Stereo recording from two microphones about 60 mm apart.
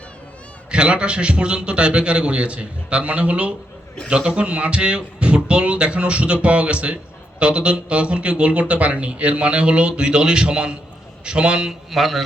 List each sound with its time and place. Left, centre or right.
0.7 s a man's voice: centre
11.9 s speech: centre